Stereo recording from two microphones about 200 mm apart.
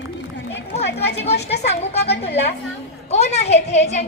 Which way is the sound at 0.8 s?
55° left (ahead or behind).